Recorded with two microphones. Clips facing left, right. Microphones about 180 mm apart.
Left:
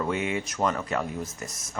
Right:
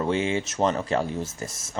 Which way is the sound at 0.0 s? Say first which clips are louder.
Right 3 dB; 30° right (ahead or behind).